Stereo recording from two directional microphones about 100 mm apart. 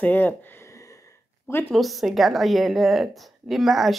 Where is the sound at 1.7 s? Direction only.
Centre (ahead or behind).